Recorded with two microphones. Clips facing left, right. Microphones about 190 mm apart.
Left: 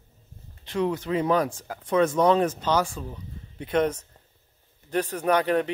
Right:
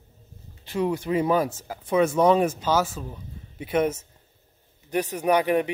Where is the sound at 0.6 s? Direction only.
10° right (ahead or behind).